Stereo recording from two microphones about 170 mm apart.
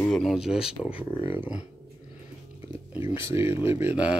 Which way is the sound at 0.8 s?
10° left (ahead or behind).